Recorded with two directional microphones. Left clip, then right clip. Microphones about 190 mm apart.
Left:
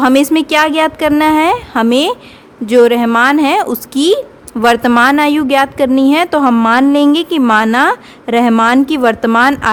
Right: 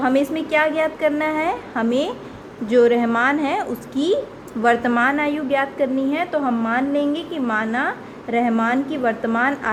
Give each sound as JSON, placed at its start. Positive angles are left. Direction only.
{"t": 0.0, "sound": "a woman's voice", "side_deg": 45}